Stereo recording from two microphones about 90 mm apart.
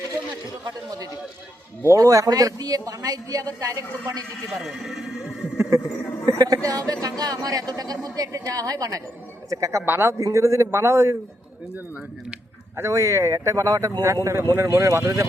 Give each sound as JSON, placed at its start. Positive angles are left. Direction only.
{"t": 1.8, "sound": "a man's voice", "side_deg": -35}
{"t": 4.6, "sound": "speech", "side_deg": 0}
{"t": 6.2, "sound": "a man's voice", "side_deg": -40}
{"t": 9.8, "sound": "a man's voice", "side_deg": -25}
{"t": 12.7, "sound": "a man's voice", "side_deg": -30}